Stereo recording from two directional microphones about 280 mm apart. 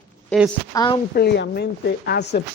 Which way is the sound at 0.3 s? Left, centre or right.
Centre.